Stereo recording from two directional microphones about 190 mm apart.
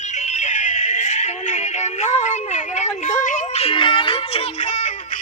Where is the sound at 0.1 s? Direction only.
35° left (ahead or behind).